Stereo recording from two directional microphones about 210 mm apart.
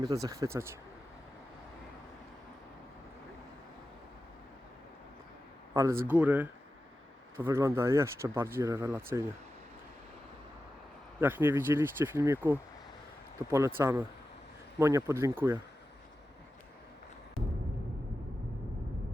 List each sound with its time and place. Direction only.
0.0 s speech: 15° right (ahead or behind)
5.7 s a man's voice: 15° right (ahead or behind)
11.2 s speech: 10° right (ahead or behind)